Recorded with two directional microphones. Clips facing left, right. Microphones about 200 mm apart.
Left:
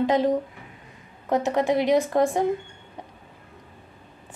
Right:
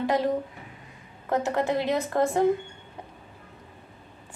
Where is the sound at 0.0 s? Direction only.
20° left (ahead or behind).